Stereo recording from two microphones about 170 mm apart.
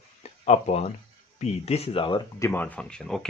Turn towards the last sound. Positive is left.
turn(degrees=5)  # may be behind; listen again after turning